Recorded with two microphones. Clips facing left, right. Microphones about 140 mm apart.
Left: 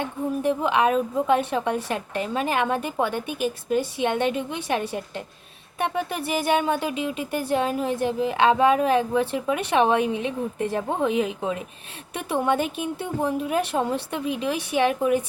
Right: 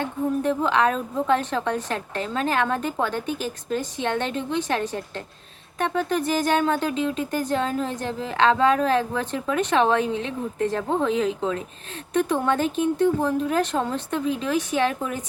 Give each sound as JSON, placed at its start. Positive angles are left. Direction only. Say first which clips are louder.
{"t": 0.0, "sound": "a woman's voice", "louder": "right 1 dB", "side_deg": 15}